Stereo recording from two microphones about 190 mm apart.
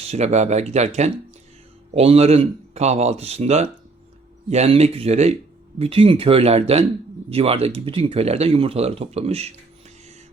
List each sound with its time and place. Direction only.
0.0 s speech: 35° right (ahead or behind)